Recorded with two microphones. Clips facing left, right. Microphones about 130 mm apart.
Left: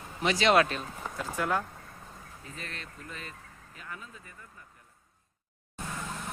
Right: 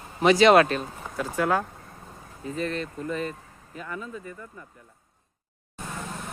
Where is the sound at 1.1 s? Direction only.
75° right (ahead or behind).